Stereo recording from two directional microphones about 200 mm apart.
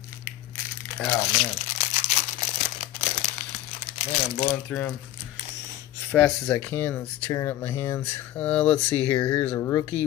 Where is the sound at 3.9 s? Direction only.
30° left (ahead or behind).